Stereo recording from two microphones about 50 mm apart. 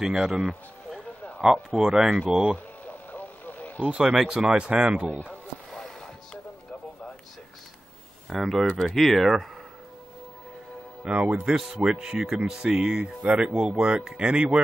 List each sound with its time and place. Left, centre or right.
0.0 s speech: centre
2.5 s radio: left
4.0 s speech: centre
5.7 s a sound: centre
8.3 s speech: centre
11.1 s speech: right
11.4 s speech: centre
13.2 s speech: right